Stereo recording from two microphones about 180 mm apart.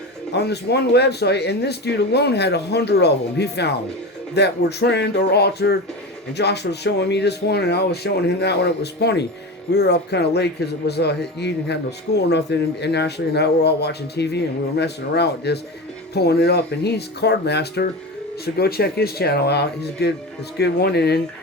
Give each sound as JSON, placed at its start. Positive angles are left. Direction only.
{"t": 0.3, "sound": "a man's voice", "side_deg": 65}